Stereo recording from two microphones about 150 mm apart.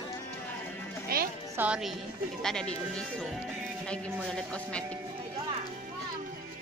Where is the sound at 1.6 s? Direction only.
5° right (ahead or behind).